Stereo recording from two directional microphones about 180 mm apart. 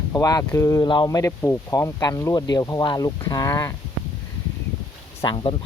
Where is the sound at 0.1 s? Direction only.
20° left (ahead or behind).